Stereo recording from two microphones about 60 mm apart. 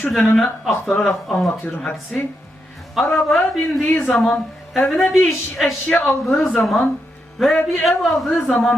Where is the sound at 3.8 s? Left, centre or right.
Left.